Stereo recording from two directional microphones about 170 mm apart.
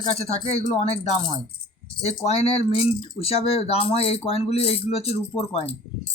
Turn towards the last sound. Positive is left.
turn(degrees=35)  # may be behind; listen again after turning